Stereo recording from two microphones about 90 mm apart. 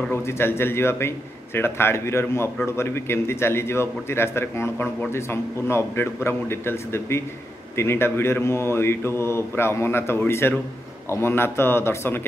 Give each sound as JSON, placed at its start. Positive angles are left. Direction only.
{"t": 0.1, "sound": "a man's voice", "side_deg": 25}